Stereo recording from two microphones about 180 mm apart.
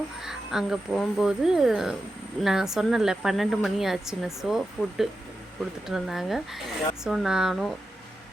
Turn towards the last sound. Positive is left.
turn(degrees=0)  # may be behind; listen again after turning